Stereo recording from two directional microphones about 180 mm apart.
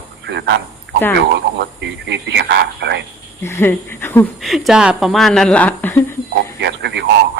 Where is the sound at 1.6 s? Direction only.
75° right (ahead or behind).